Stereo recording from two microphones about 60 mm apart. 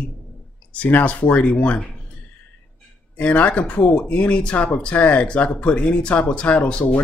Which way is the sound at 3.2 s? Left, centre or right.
Left.